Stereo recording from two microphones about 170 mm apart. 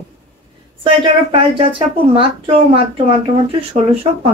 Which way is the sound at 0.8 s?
30° right (ahead or behind).